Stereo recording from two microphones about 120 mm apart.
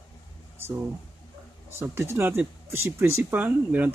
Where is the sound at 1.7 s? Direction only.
20° right (ahead or behind).